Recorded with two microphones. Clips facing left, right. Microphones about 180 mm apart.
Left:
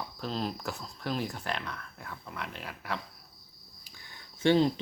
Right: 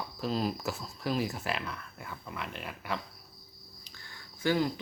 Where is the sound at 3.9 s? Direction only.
15° left (ahead or behind).